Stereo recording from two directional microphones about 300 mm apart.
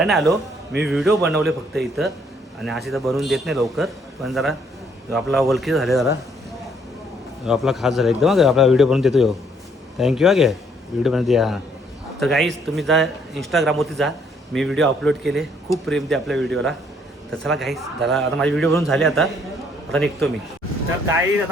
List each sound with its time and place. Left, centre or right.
0.0 s speech: centre
7.4 s speech: centre